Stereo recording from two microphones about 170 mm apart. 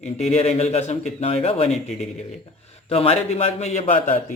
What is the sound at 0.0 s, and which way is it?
A man's voice, 40° left (ahead or behind).